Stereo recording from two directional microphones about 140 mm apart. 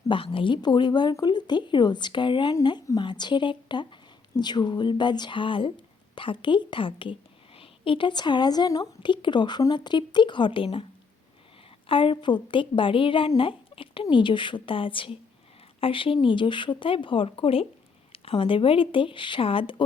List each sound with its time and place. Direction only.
0.1 s speech: 40° left (ahead or behind)
11.9 s speech: 40° left (ahead or behind)